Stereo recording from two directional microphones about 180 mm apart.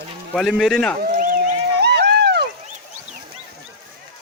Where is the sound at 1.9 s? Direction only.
65° right (ahead or behind).